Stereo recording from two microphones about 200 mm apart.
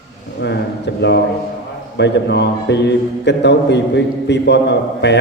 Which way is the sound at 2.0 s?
60° left (ahead or behind).